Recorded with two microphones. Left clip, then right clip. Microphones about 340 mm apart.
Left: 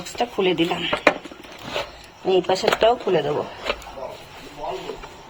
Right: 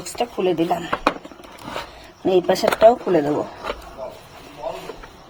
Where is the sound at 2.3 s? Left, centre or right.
Right.